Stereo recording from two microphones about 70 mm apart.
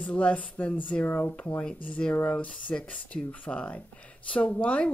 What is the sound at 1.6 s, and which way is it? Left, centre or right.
Speech, centre.